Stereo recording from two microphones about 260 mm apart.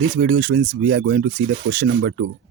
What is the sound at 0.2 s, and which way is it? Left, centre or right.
Speech, right.